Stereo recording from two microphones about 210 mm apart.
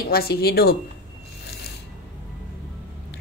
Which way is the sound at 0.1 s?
45° left (ahead or behind).